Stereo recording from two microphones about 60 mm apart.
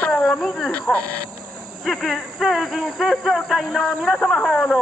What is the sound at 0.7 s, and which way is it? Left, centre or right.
Speech, left.